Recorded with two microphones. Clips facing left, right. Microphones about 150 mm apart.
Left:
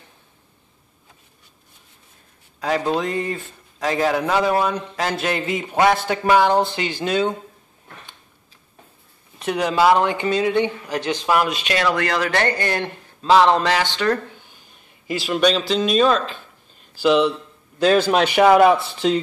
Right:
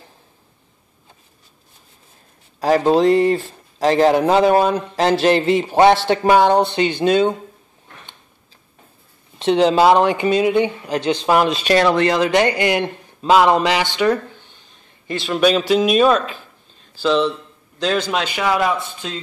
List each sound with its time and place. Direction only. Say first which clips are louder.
2.6 s a man's voice: right 7 dB; 35° right (ahead or behind)
9.4 s a man's voice: right 5 dB; 25° right (ahead or behind)
11.9 s a man's voice: right 5 dB; 20° right (ahead or behind)
14.3 s a sound: right 1 dB; 10° left (ahead or behind)
15.7 s a man's voice: right 3 dB; 10° right (ahead or behind)
16.9 s a man's voice: left 1 dB; 10° left (ahead or behind)